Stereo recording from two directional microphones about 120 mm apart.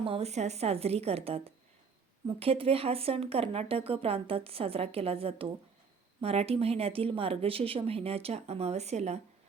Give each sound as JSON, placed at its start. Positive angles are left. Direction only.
{"t": 0.0, "sound": "speech", "side_deg": -55}
{"t": 2.4, "sound": "speech", "side_deg": -55}